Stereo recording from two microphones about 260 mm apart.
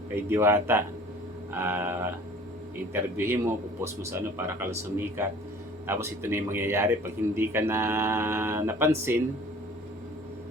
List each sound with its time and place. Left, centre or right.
0.3 s speech: centre